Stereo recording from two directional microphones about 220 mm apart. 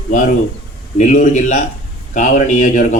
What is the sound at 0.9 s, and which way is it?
Speech, 35° left (ahead or behind).